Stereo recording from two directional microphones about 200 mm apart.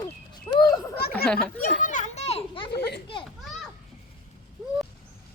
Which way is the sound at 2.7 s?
55° left (ahead or behind).